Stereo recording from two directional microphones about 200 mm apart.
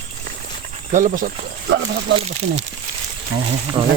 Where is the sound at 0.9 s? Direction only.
40° right (ahead or behind).